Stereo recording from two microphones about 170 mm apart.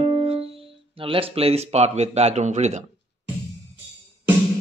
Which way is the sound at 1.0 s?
35° right (ahead or behind).